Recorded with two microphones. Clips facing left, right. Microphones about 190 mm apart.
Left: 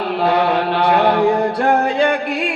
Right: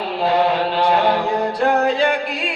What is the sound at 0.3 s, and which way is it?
Chant, 60° left (ahead or behind).